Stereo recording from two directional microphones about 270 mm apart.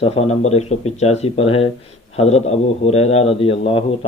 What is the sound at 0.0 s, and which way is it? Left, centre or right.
Speech, left.